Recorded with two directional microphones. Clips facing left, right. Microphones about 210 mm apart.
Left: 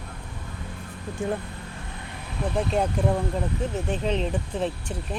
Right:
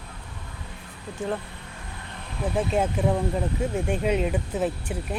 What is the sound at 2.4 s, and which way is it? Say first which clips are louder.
Speech: even; 5° right (ahead or behind).